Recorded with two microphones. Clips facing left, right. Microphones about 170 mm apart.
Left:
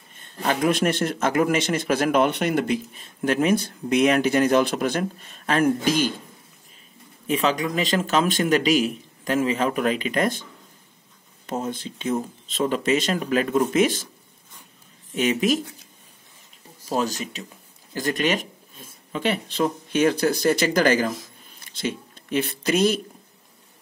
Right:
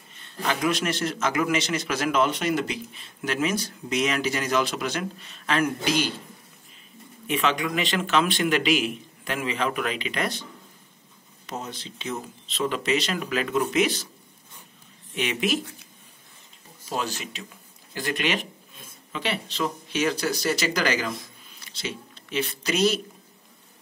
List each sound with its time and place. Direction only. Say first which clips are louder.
0.1 s a man's voice: left 3 dB; 45° left (ahead or behind)
7.2 s a man's voice: left 3 dB; 35° left (ahead or behind)
11.4 s a man's voice: left 7 dB; 50° left (ahead or behind)
15.1 s a man's voice: left 5 dB; 40° left (ahead or behind)
16.9 s a man's voice: left 5 dB; 40° left (ahead or behind)